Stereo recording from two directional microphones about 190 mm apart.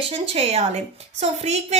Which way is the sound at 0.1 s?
30° right (ahead or behind).